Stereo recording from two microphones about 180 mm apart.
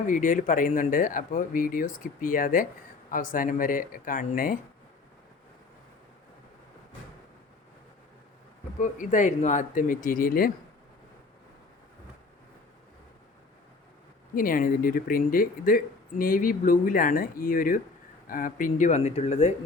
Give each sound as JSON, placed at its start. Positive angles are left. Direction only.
{"t": 0.1, "sound": "speech", "side_deg": 45}
{"t": 8.8, "sound": "speech", "side_deg": 45}
{"t": 14.3, "sound": "speech", "side_deg": 50}